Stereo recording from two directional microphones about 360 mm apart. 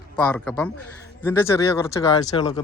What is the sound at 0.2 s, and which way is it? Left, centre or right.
Speech, centre.